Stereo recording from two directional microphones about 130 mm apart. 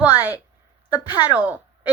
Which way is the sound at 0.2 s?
15° right (ahead or behind).